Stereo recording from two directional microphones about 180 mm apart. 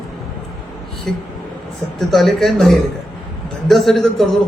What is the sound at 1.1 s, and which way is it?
A man's voice, centre (ahead or behind).